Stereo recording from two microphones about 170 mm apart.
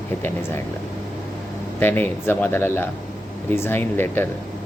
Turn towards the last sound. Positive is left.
turn(degrees=10)  # may be behind; listen again after turning